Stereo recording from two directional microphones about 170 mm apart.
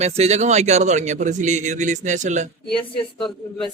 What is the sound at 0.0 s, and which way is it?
A man's voice, 40° right (ahead or behind).